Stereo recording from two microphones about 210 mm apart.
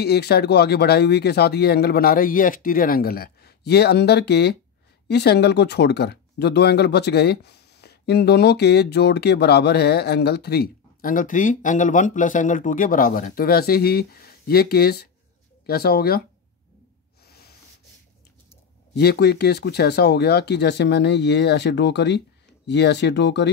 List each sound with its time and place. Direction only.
0.0 s speech: 50° left (ahead or behind)
17.3 s a sound: 50° left (ahead or behind)
18.9 s speech: 50° left (ahead or behind)